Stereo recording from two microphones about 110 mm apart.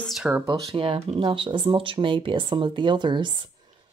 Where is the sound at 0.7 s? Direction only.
55° right (ahead or behind).